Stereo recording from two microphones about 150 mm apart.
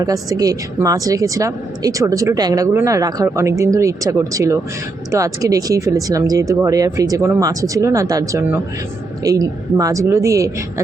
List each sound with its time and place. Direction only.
0.0 s a woman's voice: 25° right (ahead or behind)